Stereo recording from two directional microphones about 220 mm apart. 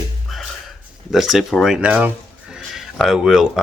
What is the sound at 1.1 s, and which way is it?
Speech, centre (ahead or behind).